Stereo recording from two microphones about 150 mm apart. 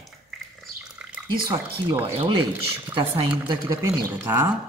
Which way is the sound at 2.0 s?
40° right (ahead or behind).